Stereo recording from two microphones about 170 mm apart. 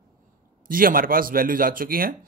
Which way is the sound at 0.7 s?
55° right (ahead or behind).